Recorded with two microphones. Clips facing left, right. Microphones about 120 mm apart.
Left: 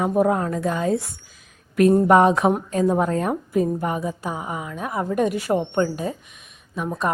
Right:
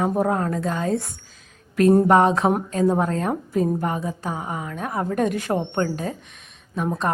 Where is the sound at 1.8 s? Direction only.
30° right (ahead or behind).